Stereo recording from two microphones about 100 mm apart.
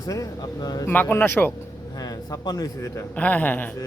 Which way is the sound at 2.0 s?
40° left (ahead or behind).